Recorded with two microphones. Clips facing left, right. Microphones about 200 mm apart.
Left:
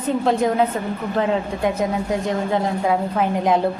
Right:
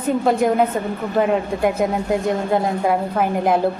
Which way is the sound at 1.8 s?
5° right (ahead or behind).